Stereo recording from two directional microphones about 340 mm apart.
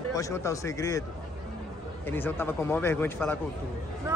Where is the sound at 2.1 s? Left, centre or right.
Centre.